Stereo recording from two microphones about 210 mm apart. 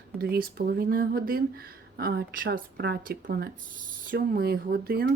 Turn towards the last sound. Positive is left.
turn(degrees=-45)  # may be behind; listen again after turning